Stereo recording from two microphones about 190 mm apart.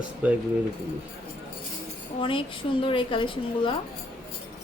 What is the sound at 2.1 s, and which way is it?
A woman's voice, 25° left (ahead or behind).